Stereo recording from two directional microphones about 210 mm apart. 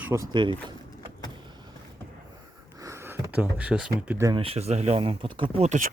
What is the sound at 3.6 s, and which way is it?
Speech, 5° right (ahead or behind).